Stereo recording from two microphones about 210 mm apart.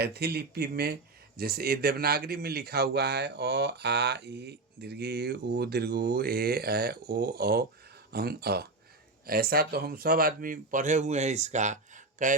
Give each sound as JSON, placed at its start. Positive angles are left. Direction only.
{"t": 0.0, "sound": "speech", "side_deg": -50}